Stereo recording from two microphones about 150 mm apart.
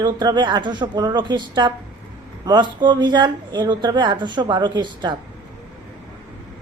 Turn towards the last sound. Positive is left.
turn(degrees=-30)  # may be behind; listen again after turning